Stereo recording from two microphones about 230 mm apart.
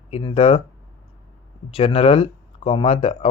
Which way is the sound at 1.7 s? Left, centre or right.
Left.